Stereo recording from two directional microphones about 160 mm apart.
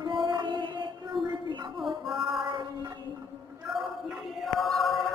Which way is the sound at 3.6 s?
Centre (ahead or behind).